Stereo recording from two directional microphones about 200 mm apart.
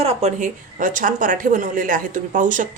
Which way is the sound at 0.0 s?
30° right (ahead or behind).